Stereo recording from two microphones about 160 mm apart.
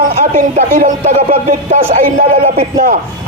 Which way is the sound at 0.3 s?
50° right (ahead or behind).